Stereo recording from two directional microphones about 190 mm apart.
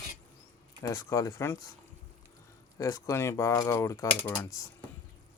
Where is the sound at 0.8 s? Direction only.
20° left (ahead or behind).